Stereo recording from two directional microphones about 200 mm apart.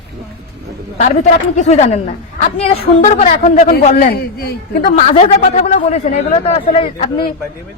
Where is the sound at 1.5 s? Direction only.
35° left (ahead or behind).